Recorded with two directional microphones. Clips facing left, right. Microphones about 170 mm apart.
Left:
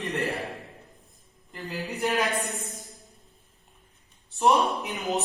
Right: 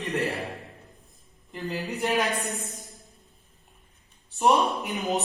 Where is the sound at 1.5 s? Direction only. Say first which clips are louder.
Right 2 dB; centre (ahead or behind).